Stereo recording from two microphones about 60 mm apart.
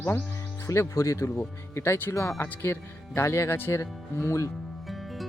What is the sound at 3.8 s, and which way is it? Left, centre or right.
Speech, left.